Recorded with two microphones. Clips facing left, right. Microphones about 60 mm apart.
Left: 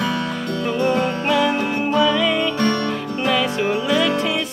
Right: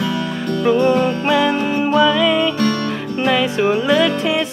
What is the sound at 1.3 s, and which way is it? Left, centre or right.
Music, right.